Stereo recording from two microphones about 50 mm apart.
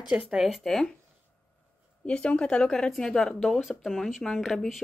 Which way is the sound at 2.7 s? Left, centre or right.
Centre.